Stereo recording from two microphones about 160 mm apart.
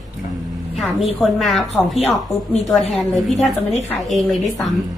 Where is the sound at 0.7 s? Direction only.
Centre (ahead or behind).